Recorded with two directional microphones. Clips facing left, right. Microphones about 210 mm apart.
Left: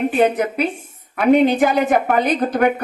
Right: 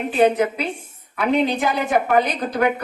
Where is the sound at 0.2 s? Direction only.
50° left (ahead or behind).